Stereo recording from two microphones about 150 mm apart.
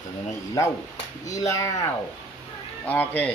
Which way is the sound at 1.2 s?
20° left (ahead or behind).